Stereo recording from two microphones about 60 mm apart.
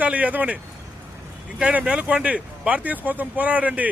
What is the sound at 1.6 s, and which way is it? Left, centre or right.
Speech, centre.